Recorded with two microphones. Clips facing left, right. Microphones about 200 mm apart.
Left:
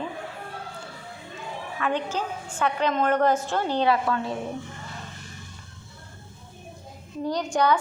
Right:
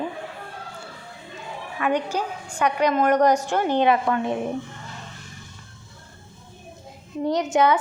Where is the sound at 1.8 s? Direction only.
15° right (ahead or behind).